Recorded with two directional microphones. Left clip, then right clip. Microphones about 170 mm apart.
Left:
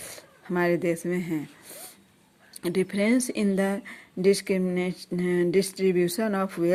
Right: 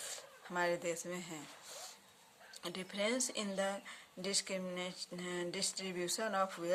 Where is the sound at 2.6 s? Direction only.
35° left (ahead or behind).